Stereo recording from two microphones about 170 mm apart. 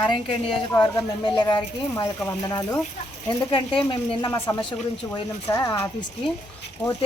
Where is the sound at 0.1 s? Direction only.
30° left (ahead or behind).